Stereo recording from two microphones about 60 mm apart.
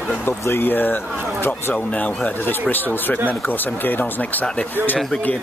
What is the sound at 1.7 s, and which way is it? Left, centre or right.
Speech, left.